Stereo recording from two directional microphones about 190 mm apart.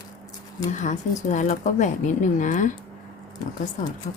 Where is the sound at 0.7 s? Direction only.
40° left (ahead or behind).